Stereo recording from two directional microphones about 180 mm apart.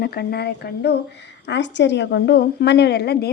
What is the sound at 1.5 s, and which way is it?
A woman's voice, 80° left.